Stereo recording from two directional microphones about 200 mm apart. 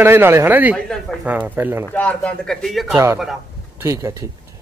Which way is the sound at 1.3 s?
10° right (ahead or behind).